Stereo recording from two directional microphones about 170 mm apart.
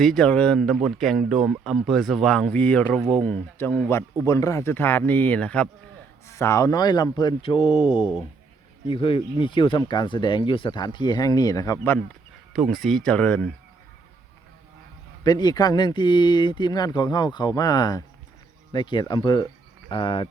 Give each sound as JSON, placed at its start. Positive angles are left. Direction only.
{"t": 0.0, "sound": "speech", "side_deg": 5}
{"t": 12.5, "sound": "speech", "side_deg": 0}
{"t": 15.2, "sound": "speech", "side_deg": 25}